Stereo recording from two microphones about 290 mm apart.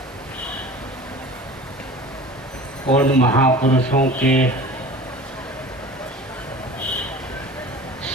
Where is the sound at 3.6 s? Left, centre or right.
Left.